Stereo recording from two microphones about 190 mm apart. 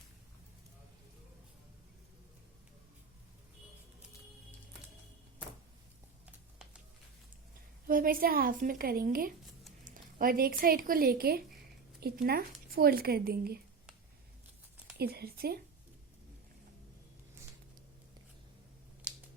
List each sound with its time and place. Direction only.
7.9 s speech: 50° right (ahead or behind)
14.9 s speech: 55° right (ahead or behind)
19.0 s scissors: 5° right (ahead or behind)